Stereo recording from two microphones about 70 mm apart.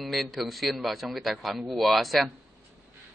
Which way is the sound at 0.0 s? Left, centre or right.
Centre.